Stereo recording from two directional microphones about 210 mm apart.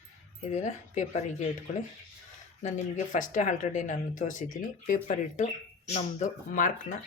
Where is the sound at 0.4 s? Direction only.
35° left (ahead or behind).